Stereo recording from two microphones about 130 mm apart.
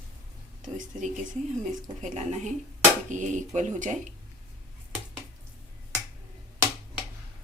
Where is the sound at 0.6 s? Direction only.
75° right (ahead or behind).